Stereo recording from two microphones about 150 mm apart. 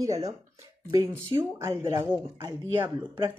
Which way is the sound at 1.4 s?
20° right (ahead or behind).